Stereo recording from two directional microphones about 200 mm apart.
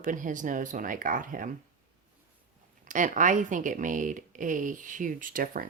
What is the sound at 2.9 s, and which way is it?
Speech, 40° right (ahead or behind).